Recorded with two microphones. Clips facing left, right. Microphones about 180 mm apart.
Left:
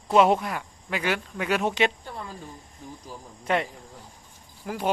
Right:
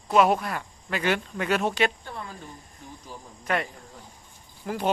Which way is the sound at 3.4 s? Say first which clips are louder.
Left 2 dB; 25° left (ahead or behind).